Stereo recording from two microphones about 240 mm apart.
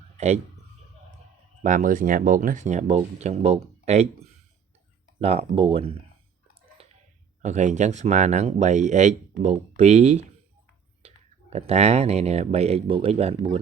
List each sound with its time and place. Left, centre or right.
0.2 s a man's voice: right
1.6 s speech: right
6.8 s a sound: right
7.4 s speech: right
11.5 s speech: right